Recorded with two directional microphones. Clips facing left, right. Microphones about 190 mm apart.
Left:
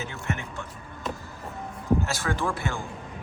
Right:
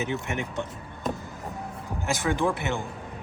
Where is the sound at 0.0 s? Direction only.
20° right (ahead or behind).